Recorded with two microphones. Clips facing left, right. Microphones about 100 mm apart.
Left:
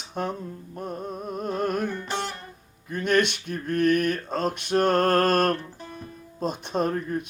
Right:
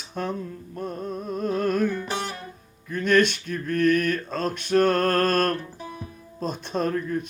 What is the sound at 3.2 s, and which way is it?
Speech, 70° left (ahead or behind).